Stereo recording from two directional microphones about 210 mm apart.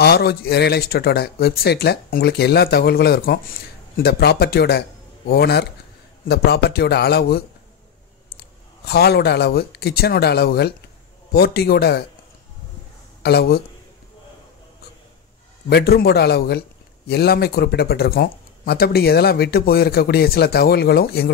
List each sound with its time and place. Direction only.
0.0 s a man's voice: 50° left (ahead or behind)
13.2 s speech: 50° left (ahead or behind)
15.7 s speech: 50° left (ahead or behind)